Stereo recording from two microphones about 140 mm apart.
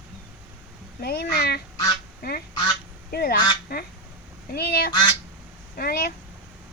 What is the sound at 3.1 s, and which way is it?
Speech, 90° left.